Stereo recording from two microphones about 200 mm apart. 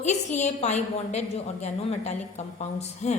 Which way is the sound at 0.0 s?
35° left (ahead or behind).